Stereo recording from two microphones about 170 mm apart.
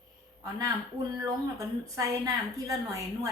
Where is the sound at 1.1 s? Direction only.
20° right (ahead or behind).